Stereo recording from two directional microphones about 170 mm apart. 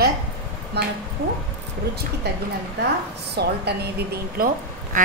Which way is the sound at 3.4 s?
70° right (ahead or behind).